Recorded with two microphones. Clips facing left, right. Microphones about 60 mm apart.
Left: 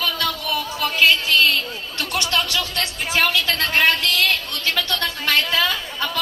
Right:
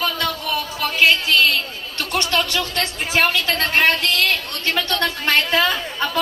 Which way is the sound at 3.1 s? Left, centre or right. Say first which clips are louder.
Right 1 dB; right.